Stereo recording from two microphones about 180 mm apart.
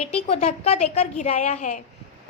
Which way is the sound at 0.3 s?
35° left (ahead or behind).